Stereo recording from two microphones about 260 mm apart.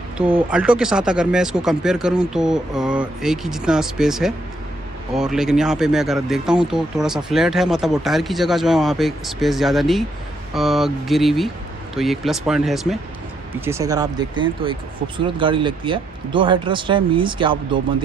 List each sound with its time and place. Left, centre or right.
0.2 s speech: centre
13.7 s speech: centre